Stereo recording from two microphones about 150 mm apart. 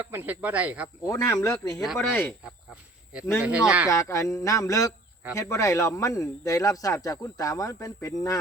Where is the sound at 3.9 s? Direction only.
20° left (ahead or behind).